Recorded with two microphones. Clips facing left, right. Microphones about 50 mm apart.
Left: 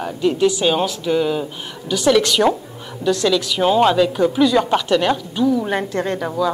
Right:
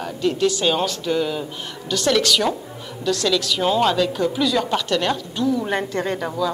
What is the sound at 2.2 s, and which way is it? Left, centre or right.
A woman's voice, left.